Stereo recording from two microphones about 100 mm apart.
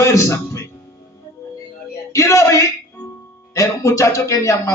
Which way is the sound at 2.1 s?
30° left (ahead or behind).